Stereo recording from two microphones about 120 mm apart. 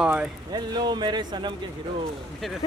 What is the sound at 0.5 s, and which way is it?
A man's voice, 35° right (ahead or behind).